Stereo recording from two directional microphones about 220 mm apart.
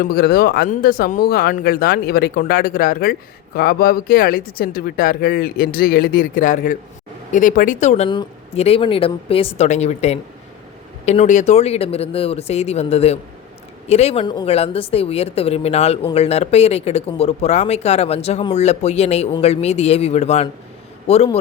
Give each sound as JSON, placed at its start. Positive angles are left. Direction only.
{"t": 0.1, "sound": "speech", "side_deg": 45}